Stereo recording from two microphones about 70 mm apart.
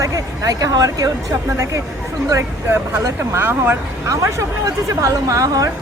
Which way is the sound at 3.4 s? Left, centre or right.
Right.